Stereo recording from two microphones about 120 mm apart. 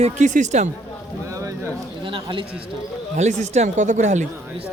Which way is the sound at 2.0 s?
45° right (ahead or behind).